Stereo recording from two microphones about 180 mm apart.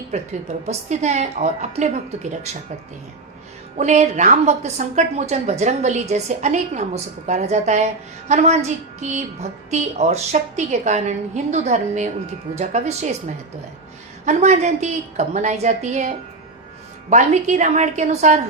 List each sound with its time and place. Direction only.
0.7 s a woman's voice: 40° right (ahead or behind)
3.8 s a woman's voice: 40° right (ahead or behind)